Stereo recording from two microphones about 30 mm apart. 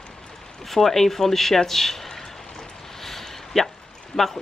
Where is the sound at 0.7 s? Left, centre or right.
Centre.